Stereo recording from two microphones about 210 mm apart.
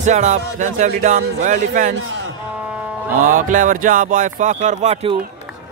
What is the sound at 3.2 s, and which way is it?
Speech, 40° right (ahead or behind).